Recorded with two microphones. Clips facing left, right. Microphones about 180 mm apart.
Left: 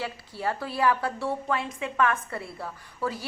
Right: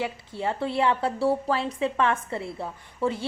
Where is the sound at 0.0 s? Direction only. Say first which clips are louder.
Right 2 dB; 20° right (ahead or behind).